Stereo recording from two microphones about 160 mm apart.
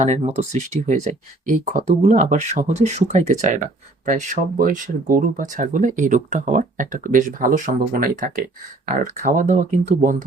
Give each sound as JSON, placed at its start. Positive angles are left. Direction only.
{"t": 0.0, "sound": "speech", "side_deg": -45}